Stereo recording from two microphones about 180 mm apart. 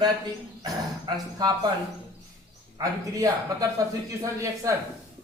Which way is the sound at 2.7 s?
20° right (ahead or behind).